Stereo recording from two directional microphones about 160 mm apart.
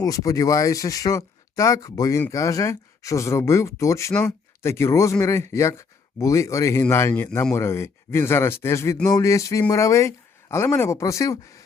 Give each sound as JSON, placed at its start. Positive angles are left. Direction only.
{"t": 0.0, "sound": "speech", "side_deg": 20}